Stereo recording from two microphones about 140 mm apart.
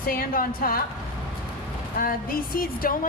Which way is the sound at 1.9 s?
90° left.